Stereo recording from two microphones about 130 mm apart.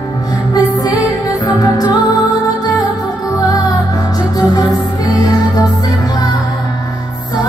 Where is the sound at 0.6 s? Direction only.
30° left (ahead or behind).